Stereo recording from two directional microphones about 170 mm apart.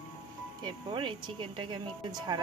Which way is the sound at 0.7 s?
25° right (ahead or behind).